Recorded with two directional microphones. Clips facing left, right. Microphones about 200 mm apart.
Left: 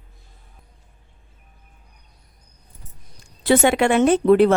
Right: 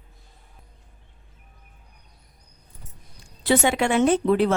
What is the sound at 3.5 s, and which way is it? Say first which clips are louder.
Speech: left 4 dB; 60° left (ahead or behind).